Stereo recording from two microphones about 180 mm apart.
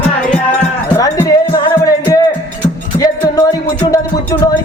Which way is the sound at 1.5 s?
20° left (ahead or behind).